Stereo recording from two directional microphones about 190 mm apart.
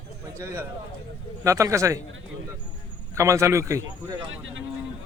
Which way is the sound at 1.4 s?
15° right (ahead or behind).